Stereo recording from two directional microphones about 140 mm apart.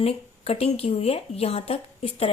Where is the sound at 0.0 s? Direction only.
45° left (ahead or behind).